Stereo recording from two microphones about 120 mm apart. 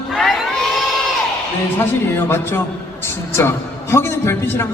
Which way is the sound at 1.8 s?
20° left (ahead or behind).